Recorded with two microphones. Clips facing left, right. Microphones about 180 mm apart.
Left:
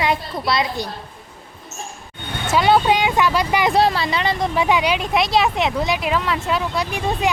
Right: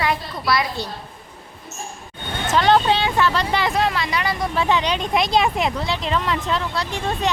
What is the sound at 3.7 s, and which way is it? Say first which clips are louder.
A woman's voice: left 4 dB; 35° left (ahead or behind).